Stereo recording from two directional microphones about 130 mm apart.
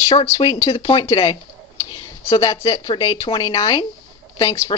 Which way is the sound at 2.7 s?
30° left (ahead or behind).